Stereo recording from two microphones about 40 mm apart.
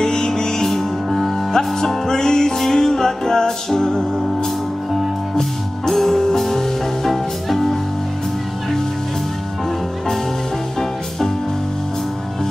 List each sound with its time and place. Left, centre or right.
0.0 s music: centre
0.7 s music: centre
10.8 s music: centre